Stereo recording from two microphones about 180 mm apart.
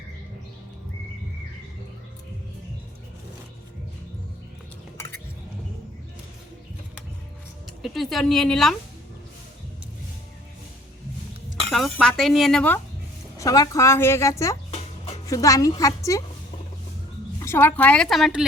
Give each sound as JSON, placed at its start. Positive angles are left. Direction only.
{"t": 7.8, "sound": "speech", "side_deg": 0}
{"t": 11.7, "sound": "speech", "side_deg": 0}
{"t": 13.3, "sound": "a woman's voice", "side_deg": 20}
{"t": 14.7, "sound": "a sound", "side_deg": 35}
{"t": 15.3, "sound": "a woman's voice", "side_deg": 20}
{"t": 17.4, "sound": "a woman's voice", "side_deg": 15}